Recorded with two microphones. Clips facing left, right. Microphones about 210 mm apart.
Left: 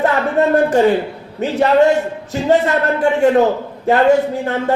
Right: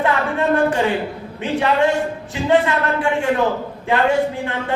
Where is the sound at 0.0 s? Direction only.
40° left (ahead or behind).